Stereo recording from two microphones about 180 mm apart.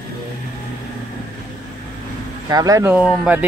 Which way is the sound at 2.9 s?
5° right (ahead or behind).